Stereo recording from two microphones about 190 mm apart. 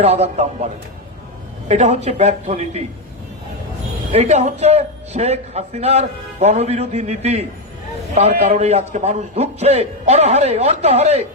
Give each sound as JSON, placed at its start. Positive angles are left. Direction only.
{"t": 0.0, "sound": "a man's voice", "side_deg": -35}
{"t": 4.1, "sound": "a man's voice", "side_deg": -35}